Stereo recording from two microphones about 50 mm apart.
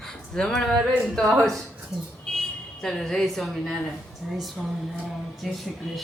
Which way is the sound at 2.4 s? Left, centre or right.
Centre.